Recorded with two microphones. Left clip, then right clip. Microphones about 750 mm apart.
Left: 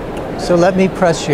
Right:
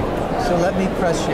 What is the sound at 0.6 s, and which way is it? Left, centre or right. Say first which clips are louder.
Speech: left 7 dB; left.